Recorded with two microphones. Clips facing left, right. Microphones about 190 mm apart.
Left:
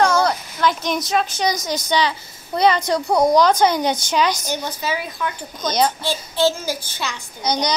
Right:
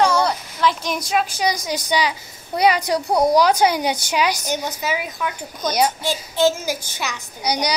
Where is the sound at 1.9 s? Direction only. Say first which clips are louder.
Left 1 dB; 10° right (ahead or behind).